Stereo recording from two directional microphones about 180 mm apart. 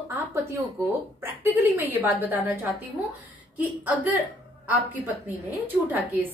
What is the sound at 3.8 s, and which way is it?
A woman's voice, 10° right (ahead or behind).